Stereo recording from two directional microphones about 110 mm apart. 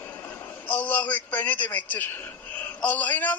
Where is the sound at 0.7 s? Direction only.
15° left (ahead or behind).